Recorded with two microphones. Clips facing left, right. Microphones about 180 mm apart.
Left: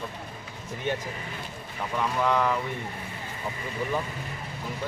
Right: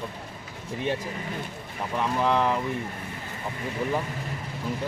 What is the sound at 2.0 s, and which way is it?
Speech, 30° right (ahead or behind).